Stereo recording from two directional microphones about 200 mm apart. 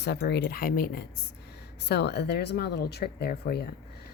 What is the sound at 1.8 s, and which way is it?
Speech, 55° left (ahead or behind).